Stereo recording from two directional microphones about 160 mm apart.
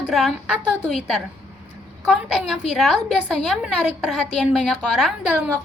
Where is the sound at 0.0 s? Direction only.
Centre (ahead or behind).